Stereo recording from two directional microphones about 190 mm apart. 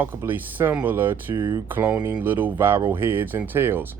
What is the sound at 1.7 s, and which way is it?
Speech, 10° right (ahead or behind).